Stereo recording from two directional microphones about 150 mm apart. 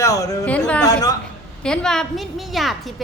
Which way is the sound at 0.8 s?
25° left (ahead or behind).